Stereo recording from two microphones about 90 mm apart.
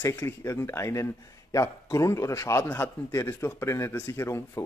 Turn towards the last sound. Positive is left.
turn(degrees=30)  # may be behind; listen again after turning